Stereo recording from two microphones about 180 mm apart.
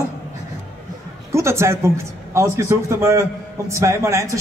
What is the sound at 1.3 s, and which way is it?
A man's voice, 15° right (ahead or behind).